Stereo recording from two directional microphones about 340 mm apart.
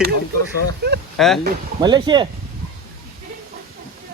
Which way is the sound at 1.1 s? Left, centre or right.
Centre.